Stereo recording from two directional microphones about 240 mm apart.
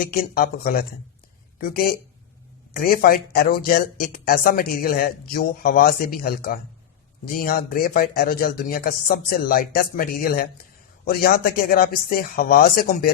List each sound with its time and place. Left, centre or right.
0.1 s speech: left